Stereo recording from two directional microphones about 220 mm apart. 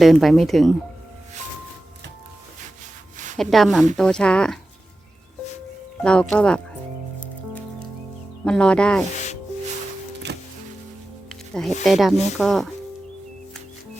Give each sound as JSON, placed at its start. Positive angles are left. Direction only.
{"t": 0.0, "sound": "speech", "side_deg": 0}
{"t": 3.3, "sound": "speech", "side_deg": 0}
{"t": 6.0, "sound": "speech", "side_deg": 5}
{"t": 8.4, "sound": "speech", "side_deg": 5}
{"t": 10.3, "sound": "music", "side_deg": -50}
{"t": 11.3, "sound": "music", "side_deg": 0}
{"t": 11.8, "sound": "speech", "side_deg": 0}